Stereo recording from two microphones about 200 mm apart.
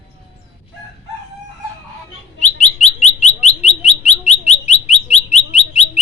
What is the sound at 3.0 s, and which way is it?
Bird, 35° left (ahead or behind).